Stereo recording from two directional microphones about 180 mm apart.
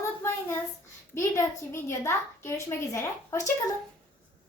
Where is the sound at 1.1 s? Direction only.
15° left (ahead or behind).